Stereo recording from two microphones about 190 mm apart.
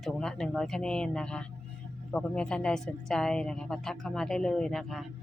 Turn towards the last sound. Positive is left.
turn(degrees=0)  # may be behind; listen again after turning